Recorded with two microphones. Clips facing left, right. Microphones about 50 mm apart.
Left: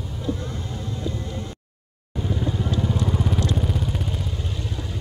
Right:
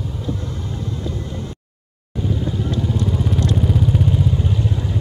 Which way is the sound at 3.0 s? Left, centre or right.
Centre.